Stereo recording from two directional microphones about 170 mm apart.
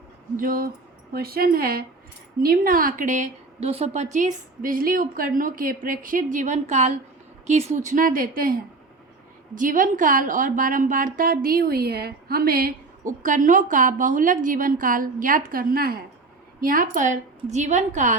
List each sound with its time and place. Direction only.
0.3 s a woman's voice: 55° right (ahead or behind)
9.6 s a woman's voice: 50° right (ahead or behind)